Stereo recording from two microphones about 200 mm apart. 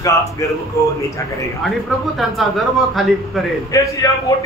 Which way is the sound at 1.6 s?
Centre (ahead or behind).